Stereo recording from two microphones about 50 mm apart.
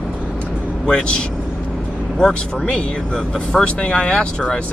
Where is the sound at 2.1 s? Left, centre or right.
Centre.